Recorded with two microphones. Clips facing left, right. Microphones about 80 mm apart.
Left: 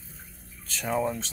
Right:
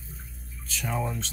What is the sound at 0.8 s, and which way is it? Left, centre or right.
Speech, centre.